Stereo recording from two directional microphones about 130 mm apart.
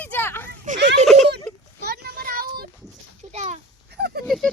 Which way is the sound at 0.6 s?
75° right (ahead or behind).